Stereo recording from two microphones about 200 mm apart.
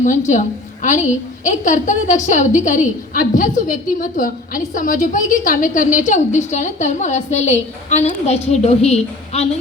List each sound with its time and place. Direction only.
0.3 s a woman's voice: 40° left (ahead or behind)